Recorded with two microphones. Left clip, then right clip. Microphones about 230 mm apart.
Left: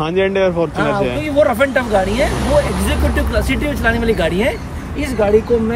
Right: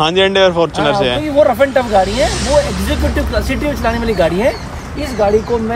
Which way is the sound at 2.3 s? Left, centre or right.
Left.